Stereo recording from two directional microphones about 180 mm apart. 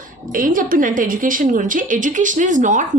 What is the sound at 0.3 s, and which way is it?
A woman's voice, 50° right (ahead or behind).